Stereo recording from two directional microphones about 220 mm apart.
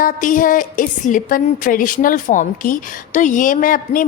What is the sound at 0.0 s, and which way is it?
A woman's voice, 35° left (ahead or behind).